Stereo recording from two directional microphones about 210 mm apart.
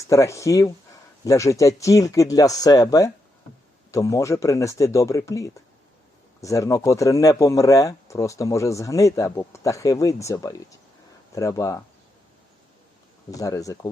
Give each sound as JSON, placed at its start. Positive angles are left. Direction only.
{"t": 0.1, "sound": "speech", "side_deg": 15}
{"t": 13.3, "sound": "speech", "side_deg": 15}